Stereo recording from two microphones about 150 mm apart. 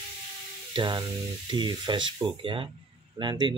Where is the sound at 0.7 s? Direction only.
30° right (ahead or behind).